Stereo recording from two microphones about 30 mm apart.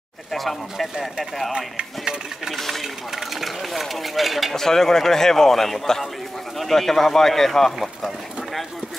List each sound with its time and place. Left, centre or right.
0.3 s speech: centre
1.8 s speech: right
2.5 s a man's voice: centre
2.8 s speech: centre
4.6 s a man's voice: centre